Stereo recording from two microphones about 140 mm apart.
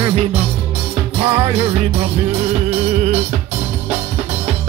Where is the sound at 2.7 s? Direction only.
50° right (ahead or behind).